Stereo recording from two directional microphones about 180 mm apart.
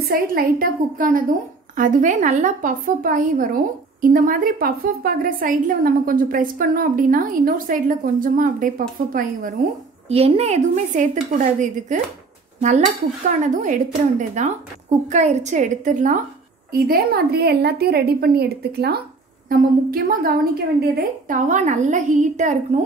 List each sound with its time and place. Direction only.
0.0 s a woman's voice: 55° right (ahead or behind)
10.0 s a woman's voice: 35° right (ahead or behind)
16.7 s a woman's voice: 55° right (ahead or behind)